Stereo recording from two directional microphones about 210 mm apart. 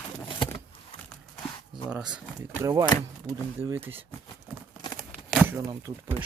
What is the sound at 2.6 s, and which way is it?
Speech, 15° right (ahead or behind).